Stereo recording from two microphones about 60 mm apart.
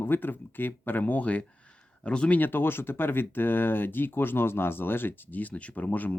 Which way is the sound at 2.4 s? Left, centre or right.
Left.